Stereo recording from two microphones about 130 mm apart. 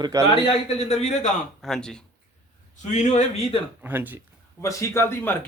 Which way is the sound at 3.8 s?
15° right (ahead or behind).